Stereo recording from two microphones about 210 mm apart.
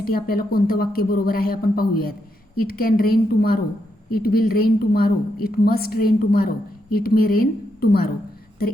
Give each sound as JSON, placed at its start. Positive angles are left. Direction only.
{"t": 0.0, "sound": "a woman's voice", "side_deg": 45}